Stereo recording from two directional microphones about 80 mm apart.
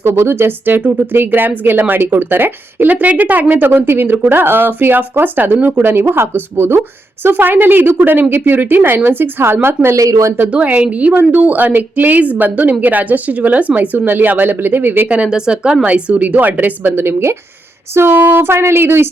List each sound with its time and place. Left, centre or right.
0.0 s speech: right
9.9 s speech: right
10.5 s speech: centre
17.9 s a sound: right